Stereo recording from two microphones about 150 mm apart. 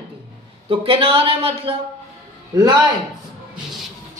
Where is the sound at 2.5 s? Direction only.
30° right (ahead or behind).